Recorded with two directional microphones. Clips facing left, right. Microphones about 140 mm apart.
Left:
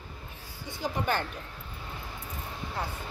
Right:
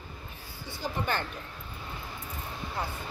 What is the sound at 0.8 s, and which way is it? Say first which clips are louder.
Speech: left 2 dB; 20° left (ahead or behind).